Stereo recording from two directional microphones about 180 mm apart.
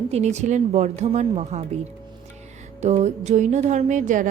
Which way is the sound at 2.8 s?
40° right (ahead or behind).